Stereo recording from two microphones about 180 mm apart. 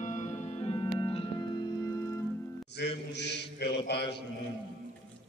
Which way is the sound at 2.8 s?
70° left (ahead or behind).